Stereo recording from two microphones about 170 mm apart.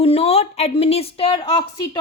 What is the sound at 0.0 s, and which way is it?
A woman's voice, 35° left (ahead or behind).